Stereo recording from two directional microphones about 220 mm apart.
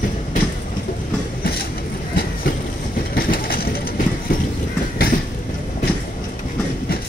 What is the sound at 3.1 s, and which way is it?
Vehicle, 45° left (ahead or behind).